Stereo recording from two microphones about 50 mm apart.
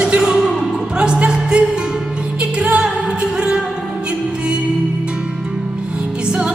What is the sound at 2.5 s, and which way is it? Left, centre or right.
Music, right.